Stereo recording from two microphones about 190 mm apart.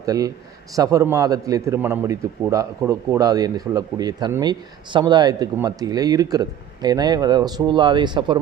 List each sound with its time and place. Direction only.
0.0 s a man's voice: 20° right (ahead or behind)